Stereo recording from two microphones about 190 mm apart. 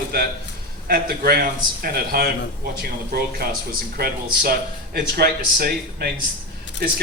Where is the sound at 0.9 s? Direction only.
50° right (ahead or behind).